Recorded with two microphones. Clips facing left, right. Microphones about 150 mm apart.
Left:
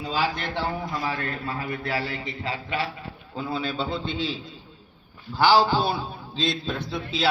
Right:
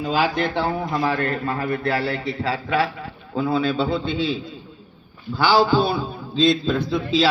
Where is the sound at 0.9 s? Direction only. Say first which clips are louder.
Right 7 dB; 65° right (ahead or behind).